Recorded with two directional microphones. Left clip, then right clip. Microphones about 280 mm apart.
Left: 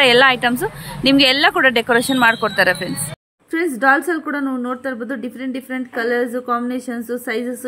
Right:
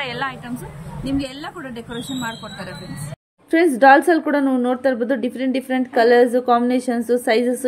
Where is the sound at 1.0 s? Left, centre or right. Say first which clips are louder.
Left 14 dB; centre.